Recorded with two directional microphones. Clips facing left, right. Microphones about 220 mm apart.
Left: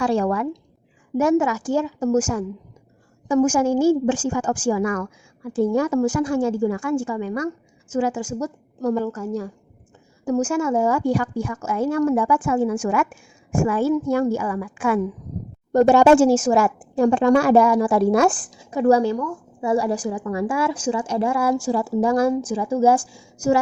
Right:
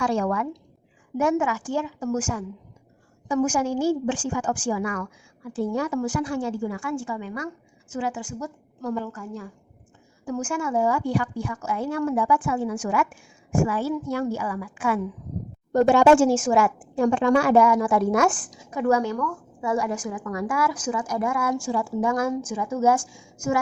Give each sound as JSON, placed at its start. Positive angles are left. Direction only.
{"t": 0.0, "sound": "a woman's voice", "side_deg": 35}
{"t": 19.1, "sound": "a woman's voice", "side_deg": 20}
{"t": 19.7, "sound": "a woman's voice", "side_deg": 35}